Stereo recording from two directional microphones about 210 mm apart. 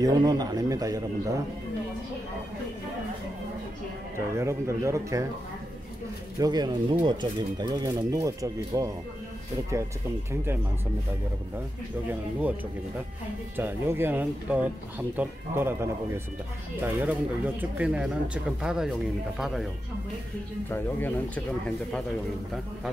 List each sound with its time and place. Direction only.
0.0 s speech: 20° right (ahead or behind)
4.4 s speech: 15° right (ahead or behind)
6.3 s speech: 20° right (ahead or behind)
12.1 s speech: 10° right (ahead or behind)
13.6 s speech: 10° right (ahead or behind)